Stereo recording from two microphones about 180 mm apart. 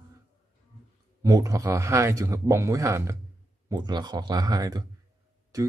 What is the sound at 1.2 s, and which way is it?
Speech, 20° right (ahead or behind).